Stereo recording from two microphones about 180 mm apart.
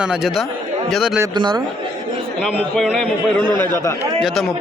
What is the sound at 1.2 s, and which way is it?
Speech, 20° right (ahead or behind).